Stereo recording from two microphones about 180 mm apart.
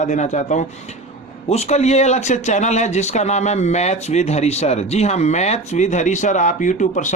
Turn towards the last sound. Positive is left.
turn(degrees=45)  # may be behind; listen again after turning